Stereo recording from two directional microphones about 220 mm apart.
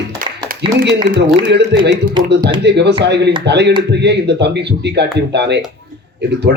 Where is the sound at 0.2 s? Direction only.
40° right (ahead or behind).